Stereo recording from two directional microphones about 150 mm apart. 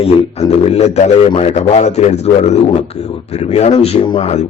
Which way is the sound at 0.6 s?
45° left (ahead or behind).